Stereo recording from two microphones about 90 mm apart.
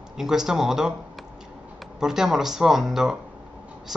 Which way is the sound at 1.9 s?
5° right (ahead or behind).